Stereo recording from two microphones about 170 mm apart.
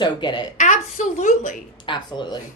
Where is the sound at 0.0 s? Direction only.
25° left (ahead or behind).